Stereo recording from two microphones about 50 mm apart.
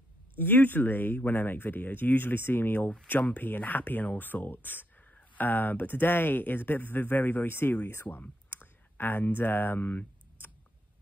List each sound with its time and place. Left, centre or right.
0.4 s speech: left
7.4 s speech: left
8.2 s clicking: left